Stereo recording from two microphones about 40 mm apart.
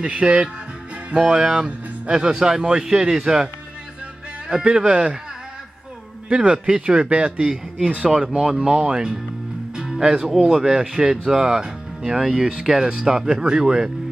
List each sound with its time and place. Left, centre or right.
0.0 s speech: right
4.5 s speech: centre
6.2 s speech: right
12.2 s speech: centre
13.0 s speech: centre